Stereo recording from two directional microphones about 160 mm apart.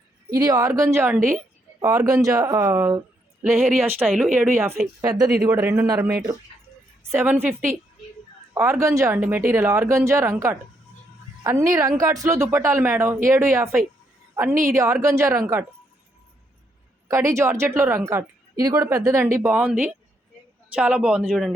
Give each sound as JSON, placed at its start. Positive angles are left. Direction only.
{"t": 0.3, "sound": "a woman's voice", "side_deg": -20}
{"t": 3.7, "sound": "speech", "side_deg": -5}
{"t": 4.9, "sound": "a woman's voice", "side_deg": -25}
{"t": 8.5, "sound": "a woman's voice", "side_deg": -20}
{"t": 17.1, "sound": "a woman's voice", "side_deg": -20}
{"t": 19.4, "sound": "speech", "side_deg": -10}